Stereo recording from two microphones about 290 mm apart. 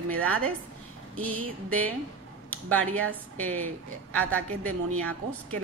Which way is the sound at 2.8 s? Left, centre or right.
Right.